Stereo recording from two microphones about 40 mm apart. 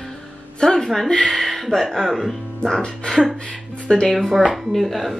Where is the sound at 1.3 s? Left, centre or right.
Centre.